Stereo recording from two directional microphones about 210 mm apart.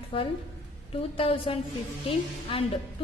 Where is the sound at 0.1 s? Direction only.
25° left (ahead or behind).